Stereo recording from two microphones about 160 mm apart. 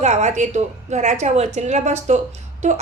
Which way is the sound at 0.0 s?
45° right (ahead or behind).